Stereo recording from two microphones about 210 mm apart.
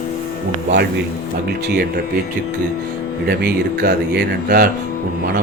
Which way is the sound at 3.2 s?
50° right (ahead or behind).